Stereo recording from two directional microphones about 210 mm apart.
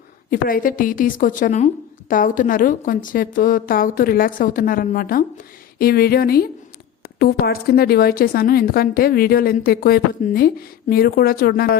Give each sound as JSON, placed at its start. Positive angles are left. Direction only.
{"t": 0.3, "sound": "a woman's voice", "side_deg": 40}